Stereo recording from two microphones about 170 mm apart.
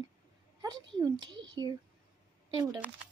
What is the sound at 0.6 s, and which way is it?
Speech, 25° right (ahead or behind).